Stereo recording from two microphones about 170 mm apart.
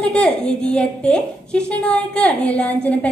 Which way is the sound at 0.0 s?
5° left (ahead or behind).